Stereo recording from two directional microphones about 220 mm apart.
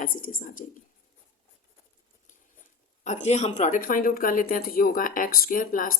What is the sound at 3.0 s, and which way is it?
Speech, 30° left (ahead or behind).